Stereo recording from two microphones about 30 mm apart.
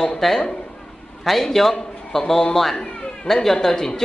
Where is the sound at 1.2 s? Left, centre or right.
Centre.